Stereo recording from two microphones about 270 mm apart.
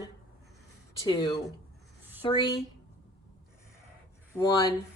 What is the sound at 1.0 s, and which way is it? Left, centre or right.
A woman's voice, centre.